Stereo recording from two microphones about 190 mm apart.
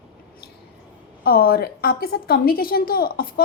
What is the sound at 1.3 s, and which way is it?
A woman's voice, 50° left (ahead or behind).